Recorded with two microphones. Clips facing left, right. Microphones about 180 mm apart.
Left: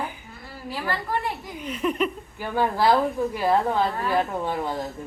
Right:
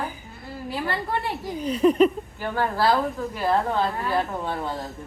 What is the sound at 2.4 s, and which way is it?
A woman's voice, 15° left (ahead or behind).